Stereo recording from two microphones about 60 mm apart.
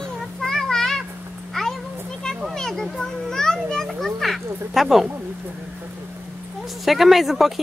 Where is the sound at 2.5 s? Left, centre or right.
Centre.